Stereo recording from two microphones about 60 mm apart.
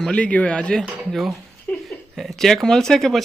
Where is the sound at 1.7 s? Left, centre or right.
Left.